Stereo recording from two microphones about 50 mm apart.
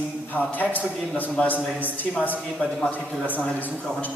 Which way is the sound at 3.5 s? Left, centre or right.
Left.